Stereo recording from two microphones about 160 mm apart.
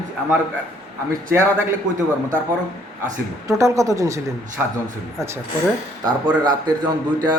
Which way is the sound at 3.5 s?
20° right (ahead or behind).